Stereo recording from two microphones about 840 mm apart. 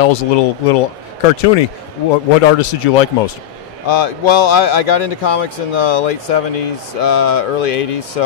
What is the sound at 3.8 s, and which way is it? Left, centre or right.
A man's voice, left.